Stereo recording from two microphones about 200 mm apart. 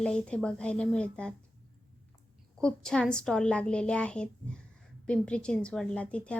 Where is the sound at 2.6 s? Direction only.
5° left (ahead or behind).